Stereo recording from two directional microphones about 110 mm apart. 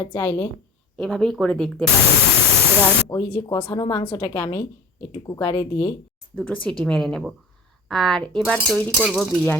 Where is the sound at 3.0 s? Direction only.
30° left (ahead or behind).